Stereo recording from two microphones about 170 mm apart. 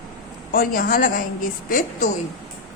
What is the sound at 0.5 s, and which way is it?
A woman's voice, 55° left (ahead or behind).